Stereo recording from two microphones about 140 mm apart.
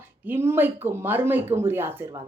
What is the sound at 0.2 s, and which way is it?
A woman's voice, 15° right (ahead or behind).